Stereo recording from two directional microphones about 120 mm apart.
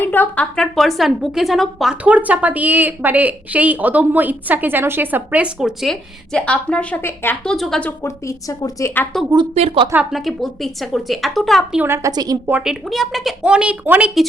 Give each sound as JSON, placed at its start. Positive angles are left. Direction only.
{"t": 0.0, "sound": "speech", "side_deg": 15}
{"t": 0.5, "sound": "a woman's voice", "side_deg": 5}
{"t": 7.4, "sound": "speech", "side_deg": 0}
{"t": 8.0, "sound": "a woman's voice", "side_deg": 25}
{"t": 9.6, "sound": "speech", "side_deg": -55}
{"t": 10.1, "sound": "speech", "side_deg": 0}
{"t": 11.8, "sound": "a woman's voice", "side_deg": -20}
{"t": 12.1, "sound": "a woman's voice", "side_deg": -35}
{"t": 12.5, "sound": "a woman's voice", "side_deg": -10}